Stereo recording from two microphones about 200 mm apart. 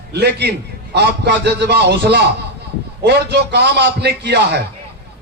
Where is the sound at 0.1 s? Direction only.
55° right (ahead or behind).